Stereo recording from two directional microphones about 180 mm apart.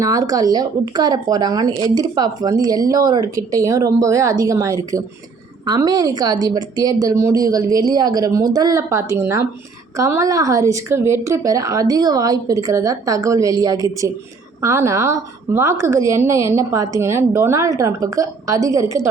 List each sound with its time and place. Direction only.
0.0 s a woman's voice: 20° right (ahead or behind)